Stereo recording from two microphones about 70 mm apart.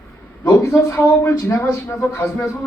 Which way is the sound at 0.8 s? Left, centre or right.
Left.